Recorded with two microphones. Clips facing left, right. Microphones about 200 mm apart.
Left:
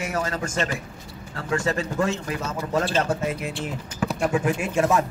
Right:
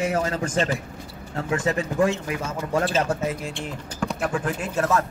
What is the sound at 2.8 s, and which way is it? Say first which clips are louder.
Speech: even; centre (ahead or behind).